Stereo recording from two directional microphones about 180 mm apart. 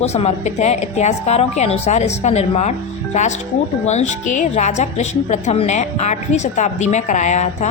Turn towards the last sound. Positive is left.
turn(degrees=40)  # may be behind; listen again after turning